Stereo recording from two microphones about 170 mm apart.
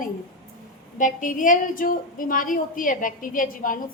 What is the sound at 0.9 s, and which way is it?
A woman's voice, 50° left (ahead or behind).